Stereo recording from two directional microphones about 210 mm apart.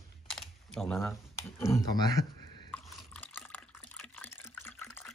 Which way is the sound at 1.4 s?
15° left (ahead or behind).